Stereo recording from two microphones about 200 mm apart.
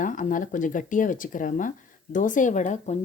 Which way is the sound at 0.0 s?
40° left (ahead or behind).